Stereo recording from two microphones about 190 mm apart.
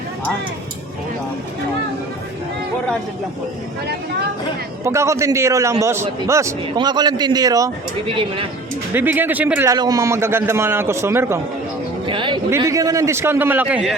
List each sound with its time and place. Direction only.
4.8 s a man's voice: 15° right (ahead or behind)
8.9 s a man's voice: 10° right (ahead or behind)
9.7 s a man's voice: 20° right (ahead or behind)
12.0 s a man's voice: 25° right (ahead or behind); by 13.9 s 5° right (ahead or behind)